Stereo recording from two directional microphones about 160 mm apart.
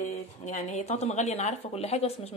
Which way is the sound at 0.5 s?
45° left (ahead or behind).